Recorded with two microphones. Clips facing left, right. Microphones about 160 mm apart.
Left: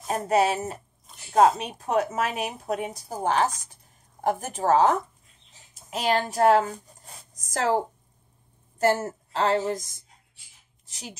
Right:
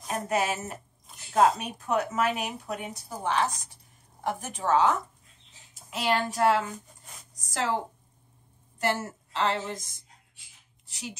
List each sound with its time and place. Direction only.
0.0 s a woman's voice: 30° left (ahead or behind)
10.9 s speech: 40° left (ahead or behind)